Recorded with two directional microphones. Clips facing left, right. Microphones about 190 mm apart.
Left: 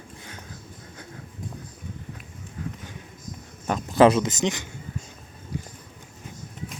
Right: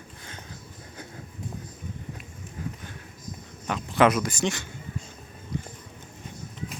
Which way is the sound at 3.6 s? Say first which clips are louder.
Left 4 dB; 40° left (ahead or behind).